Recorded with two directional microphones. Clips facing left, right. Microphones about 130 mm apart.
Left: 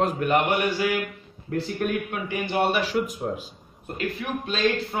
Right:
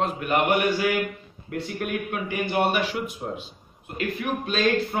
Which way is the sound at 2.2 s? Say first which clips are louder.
Even; 30° left (ahead or behind).